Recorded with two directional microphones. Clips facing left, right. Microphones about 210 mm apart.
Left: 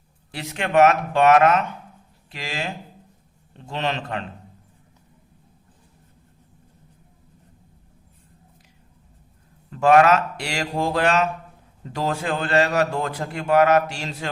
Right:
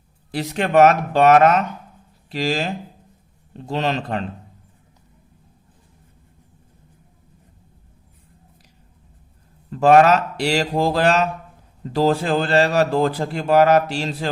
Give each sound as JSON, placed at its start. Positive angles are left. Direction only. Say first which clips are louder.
{"t": 0.3, "sound": "a man's voice", "louder": "right 5 dB", "side_deg": -40}
{"t": 9.6, "sound": "a man's voice", "louder": "right 2 dB", "side_deg": -35}